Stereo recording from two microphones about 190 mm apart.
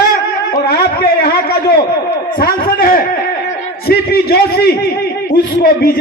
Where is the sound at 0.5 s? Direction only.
55° left (ahead or behind).